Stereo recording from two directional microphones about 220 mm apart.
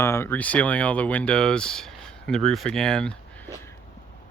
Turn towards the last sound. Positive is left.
turn(degrees=5)  # may be behind; listen again after turning